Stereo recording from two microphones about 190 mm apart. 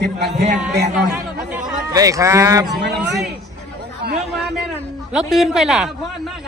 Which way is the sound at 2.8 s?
65° right (ahead or behind).